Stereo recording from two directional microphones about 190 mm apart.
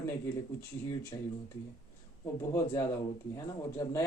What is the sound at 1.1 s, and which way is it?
Speech, 25° left (ahead or behind).